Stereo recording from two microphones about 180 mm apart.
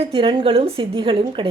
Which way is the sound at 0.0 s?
30° right (ahead or behind).